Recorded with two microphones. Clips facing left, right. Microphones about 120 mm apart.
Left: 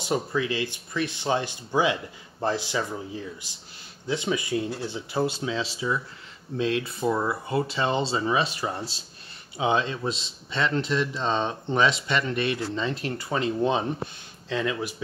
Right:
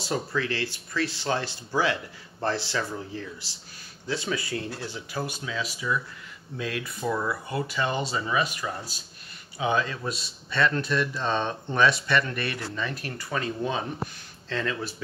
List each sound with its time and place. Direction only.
0.0 s a man's voice: 20° left (ahead or behind)